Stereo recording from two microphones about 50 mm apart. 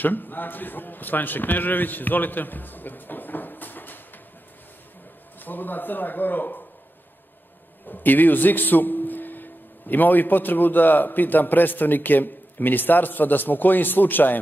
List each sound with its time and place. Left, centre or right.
0.0 s a man's voice: left
5.4 s a man's voice: left
7.9 s a man's voice: left